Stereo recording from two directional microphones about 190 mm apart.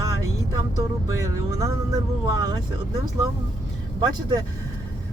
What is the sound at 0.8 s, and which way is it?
Speech, 15° right (ahead or behind).